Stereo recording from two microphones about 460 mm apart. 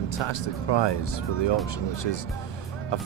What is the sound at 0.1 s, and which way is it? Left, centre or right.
Speech, left.